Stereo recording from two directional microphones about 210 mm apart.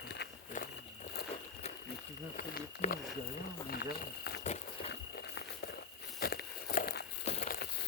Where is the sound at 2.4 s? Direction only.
40° left (ahead or behind).